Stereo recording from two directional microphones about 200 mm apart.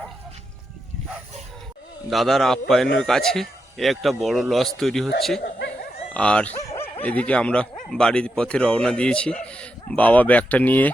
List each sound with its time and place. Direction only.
2.0 s speech: centre (ahead or behind)
5.4 s dog: 55° left (ahead or behind)
6.1 s dog: 5° left (ahead or behind)
7.0 s speech: 5° left (ahead or behind)